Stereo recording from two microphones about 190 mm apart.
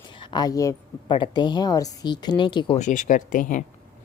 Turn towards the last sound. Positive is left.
turn(degrees=45)  # may be behind; listen again after turning